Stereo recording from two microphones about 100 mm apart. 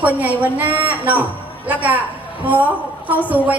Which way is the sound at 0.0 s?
15° right (ahead or behind).